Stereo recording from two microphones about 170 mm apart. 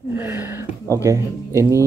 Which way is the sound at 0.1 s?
15° right (ahead or behind).